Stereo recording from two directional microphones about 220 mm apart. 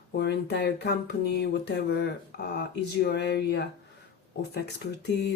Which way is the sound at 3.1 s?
50° left (ahead or behind).